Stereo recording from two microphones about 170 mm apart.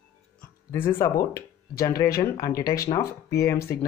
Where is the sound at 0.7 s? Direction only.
15° left (ahead or behind).